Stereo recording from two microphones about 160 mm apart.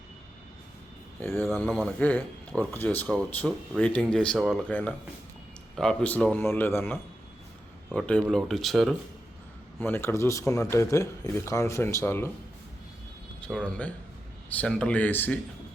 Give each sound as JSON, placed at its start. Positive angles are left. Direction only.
{"t": 1.2, "sound": "speech", "side_deg": 10}
{"t": 4.7, "sound": "speech", "side_deg": 10}
{"t": 9.7, "sound": "speech", "side_deg": 15}
{"t": 13.4, "sound": "speech", "side_deg": 5}